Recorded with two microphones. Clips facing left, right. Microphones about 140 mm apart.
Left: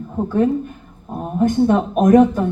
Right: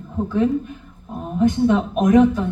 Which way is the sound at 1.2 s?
45° left (ahead or behind).